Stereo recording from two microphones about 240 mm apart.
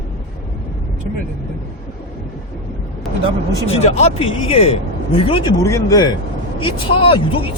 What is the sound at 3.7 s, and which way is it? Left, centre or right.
Speech, left.